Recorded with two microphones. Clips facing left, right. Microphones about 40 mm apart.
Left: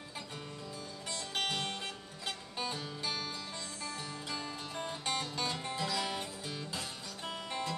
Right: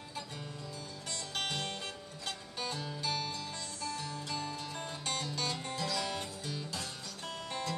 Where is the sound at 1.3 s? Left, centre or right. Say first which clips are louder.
Left 2 dB; centre.